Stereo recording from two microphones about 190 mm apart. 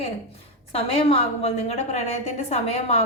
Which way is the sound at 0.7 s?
30° left (ahead or behind).